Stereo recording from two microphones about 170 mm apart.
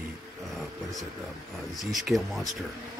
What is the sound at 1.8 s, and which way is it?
Speech, centre (ahead or behind).